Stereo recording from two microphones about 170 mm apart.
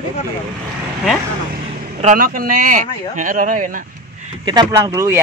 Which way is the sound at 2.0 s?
55° right (ahead or behind).